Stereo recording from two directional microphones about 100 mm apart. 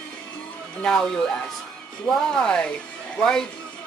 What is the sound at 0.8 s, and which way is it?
Speech, 5° left (ahead or behind).